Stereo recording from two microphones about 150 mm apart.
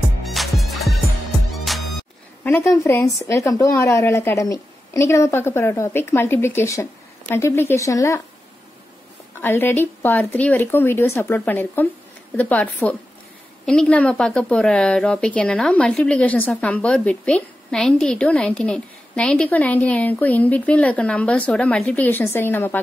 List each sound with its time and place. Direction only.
0.2 s music: centre (ahead or behind)
2.4 s a woman's voice: 15° left (ahead or behind)
9.4 s a woman's voice: 15° left (ahead or behind)